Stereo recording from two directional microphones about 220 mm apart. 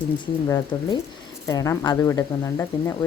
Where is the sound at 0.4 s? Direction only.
15° left (ahead or behind).